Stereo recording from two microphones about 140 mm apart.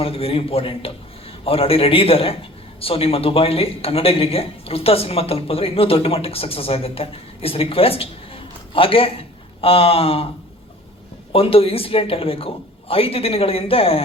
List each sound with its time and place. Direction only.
0.0 s a man's voice: 45° left (ahead or behind)
11.3 s a man's voice: 40° left (ahead or behind)